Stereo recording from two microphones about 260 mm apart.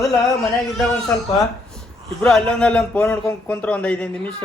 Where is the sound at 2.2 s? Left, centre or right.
Centre.